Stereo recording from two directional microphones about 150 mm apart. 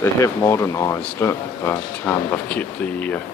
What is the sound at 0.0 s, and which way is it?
Speech, 20° left (ahead or behind).